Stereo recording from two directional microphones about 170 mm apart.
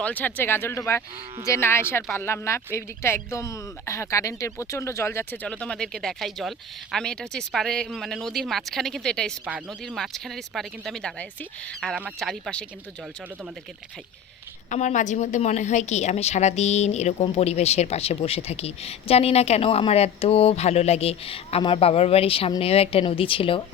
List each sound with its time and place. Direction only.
0.0 s speech: 10° left (ahead or behind)
14.7 s a woman's voice: 45° left (ahead or behind)